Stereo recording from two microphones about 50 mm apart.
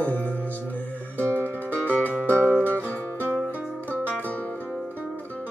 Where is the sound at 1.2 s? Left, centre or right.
Left.